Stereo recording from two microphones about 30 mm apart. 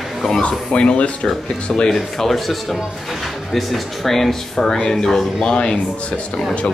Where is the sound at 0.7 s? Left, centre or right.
Left.